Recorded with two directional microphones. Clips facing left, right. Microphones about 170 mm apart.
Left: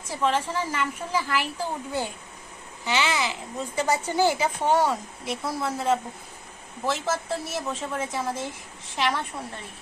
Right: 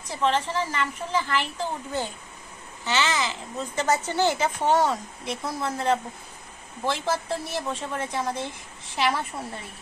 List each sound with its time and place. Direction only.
0.1 s a woman's voice: 5° left (ahead or behind)